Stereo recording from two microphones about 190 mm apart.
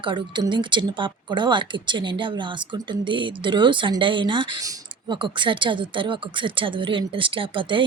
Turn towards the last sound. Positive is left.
turn(degrees=-25)  # may be behind; listen again after turning